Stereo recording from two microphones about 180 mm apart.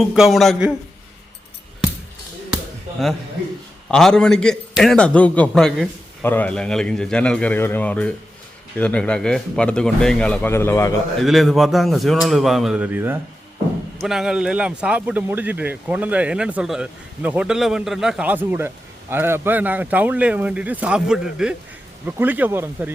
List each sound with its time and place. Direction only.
0.0 s speech: centre (ahead or behind)
3.9 s speech: 5° left (ahead or behind)
11.2 s speech: centre (ahead or behind)